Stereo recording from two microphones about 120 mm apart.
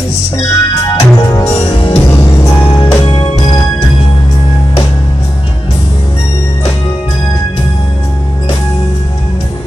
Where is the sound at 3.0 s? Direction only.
45° left (ahead or behind).